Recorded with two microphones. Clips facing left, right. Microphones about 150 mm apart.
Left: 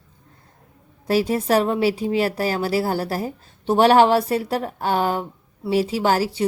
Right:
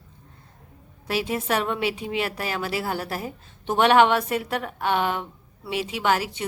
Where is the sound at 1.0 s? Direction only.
40° left (ahead or behind).